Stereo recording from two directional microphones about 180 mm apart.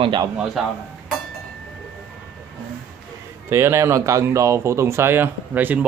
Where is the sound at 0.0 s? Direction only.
25° right (ahead or behind).